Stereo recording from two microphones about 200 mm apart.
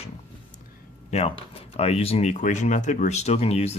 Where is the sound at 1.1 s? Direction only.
30° left (ahead or behind).